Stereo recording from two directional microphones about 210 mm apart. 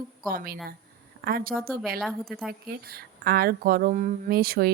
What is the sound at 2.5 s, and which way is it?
A woman's voice, 45° right (ahead or behind).